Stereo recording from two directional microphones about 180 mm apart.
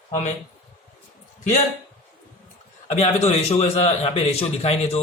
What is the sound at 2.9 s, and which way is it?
Speech, 35° left (ahead or behind).